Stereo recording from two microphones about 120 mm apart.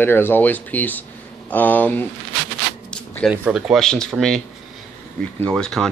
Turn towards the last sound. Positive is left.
turn(degrees=5)  # may be behind; listen again after turning